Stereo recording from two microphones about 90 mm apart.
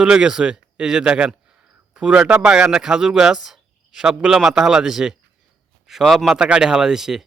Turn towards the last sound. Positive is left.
turn(degrees=-5)  # may be behind; listen again after turning